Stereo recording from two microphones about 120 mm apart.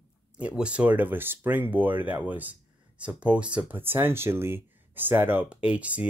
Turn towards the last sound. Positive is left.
turn(degrees=-10)  # may be behind; listen again after turning